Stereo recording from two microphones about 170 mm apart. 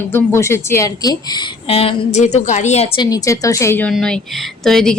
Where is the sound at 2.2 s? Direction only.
45° left (ahead or behind).